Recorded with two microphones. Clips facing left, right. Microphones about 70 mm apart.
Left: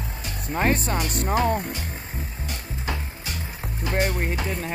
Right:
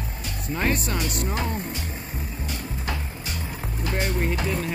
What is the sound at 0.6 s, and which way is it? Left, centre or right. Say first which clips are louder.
Music: left 3 dB; left.